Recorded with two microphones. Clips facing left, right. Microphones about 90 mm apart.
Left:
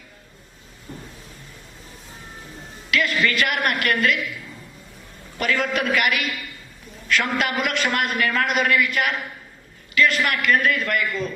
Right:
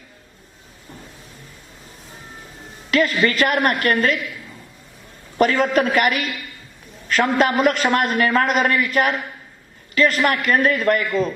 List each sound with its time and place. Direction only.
2.9 s a man's voice: 40° right (ahead or behind)
5.4 s a man's voice: 40° right (ahead or behind)